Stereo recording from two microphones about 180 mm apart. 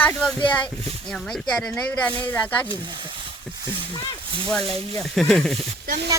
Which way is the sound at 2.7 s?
25° right (ahead or behind).